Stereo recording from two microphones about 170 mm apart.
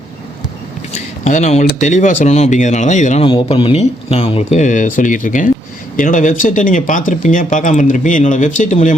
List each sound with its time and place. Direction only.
0.9 s a sound: 45° left (ahead or behind)
1.8 s speech: 45° left (ahead or behind)
3.2 s speech: 30° left (ahead or behind); by 9.0 s 50° left (ahead or behind)